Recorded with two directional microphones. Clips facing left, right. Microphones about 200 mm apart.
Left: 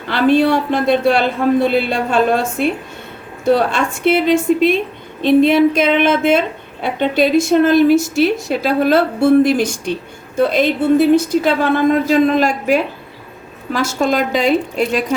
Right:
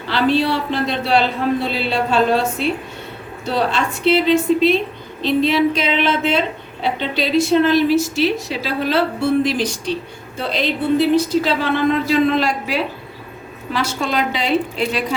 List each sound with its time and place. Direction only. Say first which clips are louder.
0.1 s a woman's voice: left 4 dB; 50° left (ahead or behind)